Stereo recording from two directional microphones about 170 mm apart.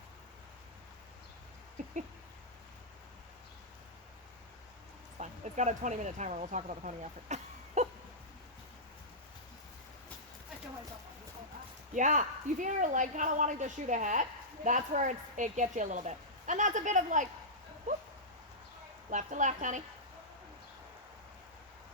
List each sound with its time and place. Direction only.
5.2 s speech: 45° right (ahead or behind)
11.9 s speech: 45° right (ahead or behind)
19.1 s speech: 45° right (ahead or behind)